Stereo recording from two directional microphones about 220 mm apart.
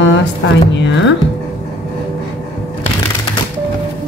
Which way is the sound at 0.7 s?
55° left (ahead or behind).